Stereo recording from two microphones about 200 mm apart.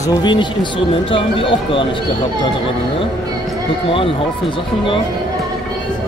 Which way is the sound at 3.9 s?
25° left (ahead or behind).